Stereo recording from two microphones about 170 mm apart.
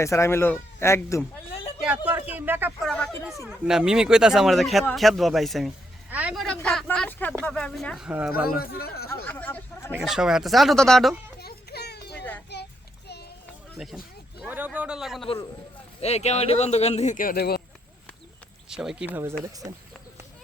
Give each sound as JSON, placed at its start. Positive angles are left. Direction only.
{"t": 0.0, "sound": "speech", "side_deg": 15}
{"t": 2.0, "sound": "a man's voice", "side_deg": -10}
{"t": 2.8, "sound": "a man's voice", "side_deg": 5}
{"t": 8.3, "sound": "speech", "side_deg": 60}
{"t": 9.2, "sound": "hubbub", "side_deg": 10}
{"t": 9.9, "sound": "a man's voice", "side_deg": -5}
{"t": 11.3, "sound": "a sound", "side_deg": 70}
{"t": 12.5, "sound": "child singing", "side_deg": 80}
{"t": 13.7, "sound": "a man's voice", "side_deg": 0}
{"t": 16.0, "sound": "speech", "side_deg": 40}
{"t": 18.7, "sound": "a man's voice", "side_deg": -5}